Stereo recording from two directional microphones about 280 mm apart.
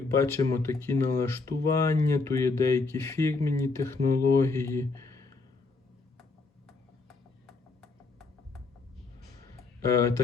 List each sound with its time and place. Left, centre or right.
0.1 s speech: centre
6.7 s a sound: centre
9.8 s speech: centre